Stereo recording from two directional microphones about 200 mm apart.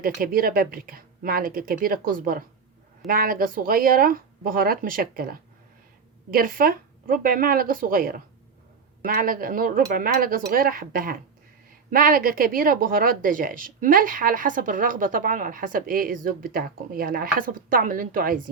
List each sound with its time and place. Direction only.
0.0 s speech: 45° right (ahead or behind)